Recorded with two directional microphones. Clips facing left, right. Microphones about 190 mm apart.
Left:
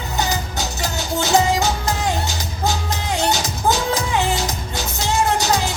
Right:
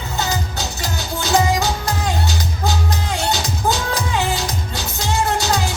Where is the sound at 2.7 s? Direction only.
20° left (ahead or behind).